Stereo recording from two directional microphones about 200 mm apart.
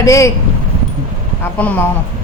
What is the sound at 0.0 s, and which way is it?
Speech, 15° left (ahead or behind).